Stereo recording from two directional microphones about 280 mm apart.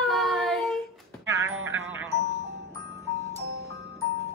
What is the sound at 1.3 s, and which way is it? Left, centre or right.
Speech, right.